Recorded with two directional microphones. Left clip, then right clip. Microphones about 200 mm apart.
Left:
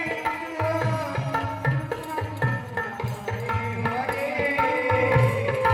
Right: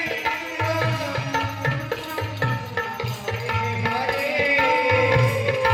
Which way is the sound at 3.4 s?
70° left (ahead or behind).